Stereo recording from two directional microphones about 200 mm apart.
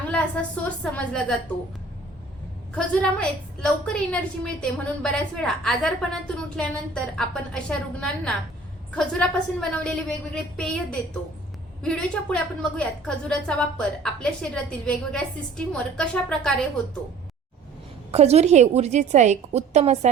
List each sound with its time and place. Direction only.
0.4 s a woman's voice: 5° left (ahead or behind)
2.7 s a woman's voice: 5° left (ahead or behind)
18.1 s a woman's voice: 30° right (ahead or behind)